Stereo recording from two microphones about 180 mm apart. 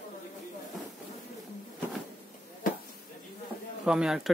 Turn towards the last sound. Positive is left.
turn(degrees=-5)  # may be behind; listen again after turning